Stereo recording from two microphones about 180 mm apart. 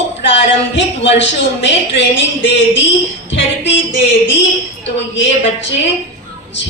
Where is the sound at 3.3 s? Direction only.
90° left.